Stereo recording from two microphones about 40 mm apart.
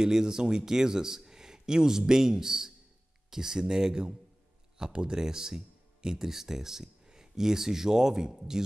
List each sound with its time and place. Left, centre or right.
0.0 s speech: centre